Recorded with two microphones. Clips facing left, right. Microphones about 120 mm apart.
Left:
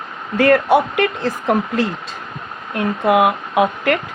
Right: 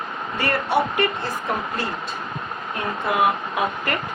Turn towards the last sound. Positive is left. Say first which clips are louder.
# left 8 dB
turn(degrees=90)